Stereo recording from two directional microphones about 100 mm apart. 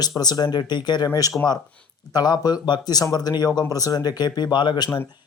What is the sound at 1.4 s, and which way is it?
Speech, 15° left (ahead or behind).